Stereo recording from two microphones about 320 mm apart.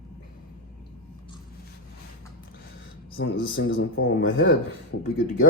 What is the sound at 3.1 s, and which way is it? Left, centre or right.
Speech, left.